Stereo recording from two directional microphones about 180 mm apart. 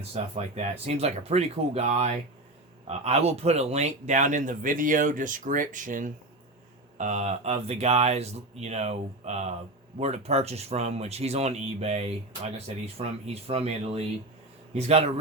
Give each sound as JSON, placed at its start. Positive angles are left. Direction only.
{"t": 0.1, "sound": "speech", "side_deg": -35}